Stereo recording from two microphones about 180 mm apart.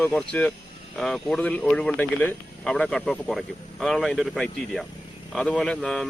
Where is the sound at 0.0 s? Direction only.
5° left (ahead or behind).